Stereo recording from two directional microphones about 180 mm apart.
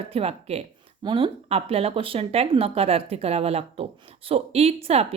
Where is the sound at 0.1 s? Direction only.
35° right (ahead or behind).